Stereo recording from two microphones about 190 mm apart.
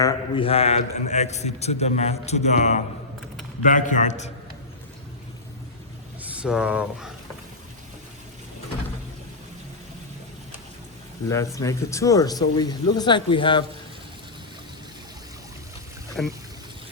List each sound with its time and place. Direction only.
0.0 s a man's voice: 30° left (ahead or behind)
6.3 s speech: 5° right (ahead or behind)
11.3 s speech: 15° left (ahead or behind)
16.2 s speech: 5° left (ahead or behind)